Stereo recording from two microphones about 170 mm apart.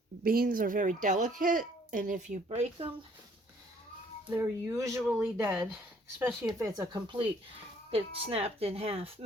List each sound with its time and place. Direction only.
0.3 s a woman's voice: 55° right (ahead or behind)
4.3 s speech: 15° right (ahead or behind); by 9.1 s 35° right (ahead or behind)